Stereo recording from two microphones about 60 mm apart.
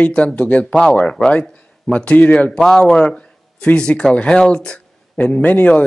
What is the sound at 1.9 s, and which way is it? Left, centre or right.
Speech, left.